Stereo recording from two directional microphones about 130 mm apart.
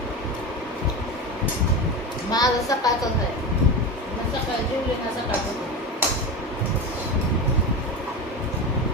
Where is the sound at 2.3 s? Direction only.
30° left (ahead or behind).